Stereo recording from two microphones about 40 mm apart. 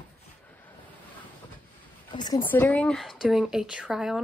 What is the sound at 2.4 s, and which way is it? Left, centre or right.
Speech, left.